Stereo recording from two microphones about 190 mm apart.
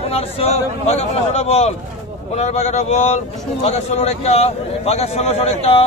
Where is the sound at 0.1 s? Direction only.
30° left (ahead or behind).